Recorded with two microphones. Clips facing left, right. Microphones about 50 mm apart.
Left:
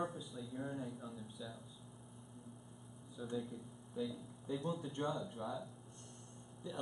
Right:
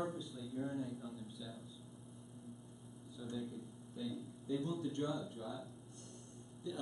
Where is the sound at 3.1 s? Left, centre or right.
Centre.